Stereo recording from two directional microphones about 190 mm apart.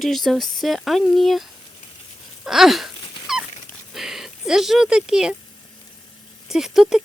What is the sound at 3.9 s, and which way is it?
Speech, centre (ahead or behind).